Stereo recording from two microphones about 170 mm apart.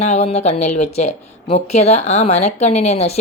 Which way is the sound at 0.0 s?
40° left (ahead or behind).